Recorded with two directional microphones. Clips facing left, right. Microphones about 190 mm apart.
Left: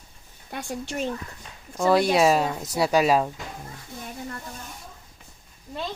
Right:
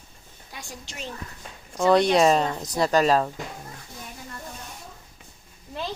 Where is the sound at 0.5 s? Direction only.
55° left (ahead or behind).